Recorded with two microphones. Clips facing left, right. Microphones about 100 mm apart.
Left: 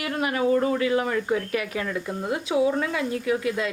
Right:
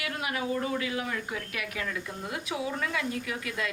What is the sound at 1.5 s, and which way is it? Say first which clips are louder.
Speech: left 8 dB; 35° left (ahead or behind).